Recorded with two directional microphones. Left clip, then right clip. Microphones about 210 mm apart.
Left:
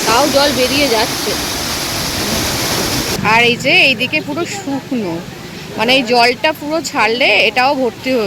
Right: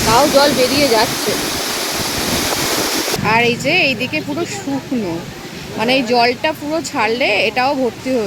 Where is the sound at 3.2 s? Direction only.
Centre (ahead or behind).